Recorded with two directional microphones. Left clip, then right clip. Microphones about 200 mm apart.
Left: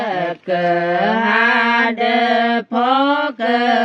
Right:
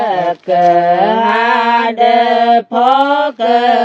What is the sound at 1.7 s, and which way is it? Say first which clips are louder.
Mantra: right 6 dB; 15° right (ahead or behind).